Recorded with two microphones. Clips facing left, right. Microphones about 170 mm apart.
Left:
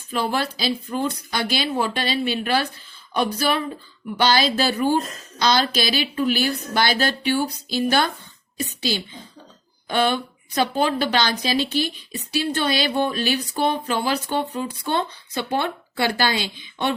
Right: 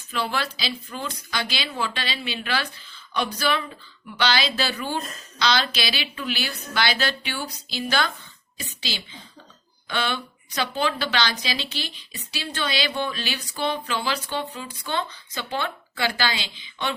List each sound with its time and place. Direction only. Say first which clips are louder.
0.2 s a woman's voice: left 4 dB; 50° left (ahead or behind)
4.2 s a woman's voice: left 5 dB; 50° left (ahead or behind)